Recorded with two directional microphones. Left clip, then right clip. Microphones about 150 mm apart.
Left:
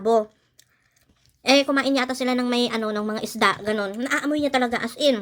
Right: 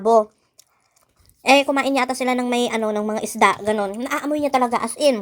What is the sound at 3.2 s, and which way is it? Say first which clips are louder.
A woman's voice: right 4 dB; 5° right (ahead or behind).